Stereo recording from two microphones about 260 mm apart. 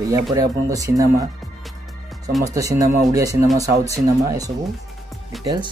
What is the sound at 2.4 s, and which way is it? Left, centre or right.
Speech, centre.